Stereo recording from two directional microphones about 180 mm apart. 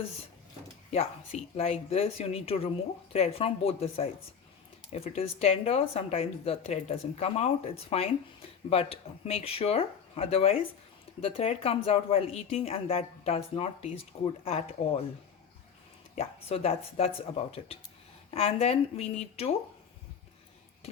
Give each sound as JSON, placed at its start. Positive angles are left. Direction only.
{"t": 1.5, "sound": "speech", "side_deg": 35}
{"t": 16.1, "sound": "speech", "side_deg": 35}